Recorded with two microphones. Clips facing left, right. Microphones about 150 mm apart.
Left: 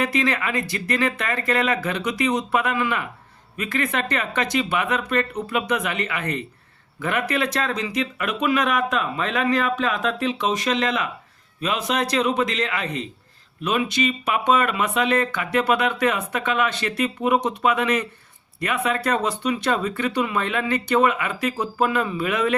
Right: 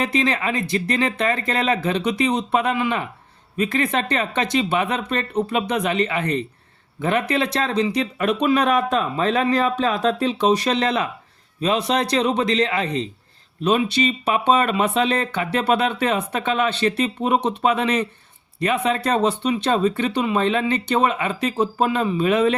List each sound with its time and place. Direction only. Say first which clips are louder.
0.0 s speech: right 1 dB; 25° right (ahead or behind)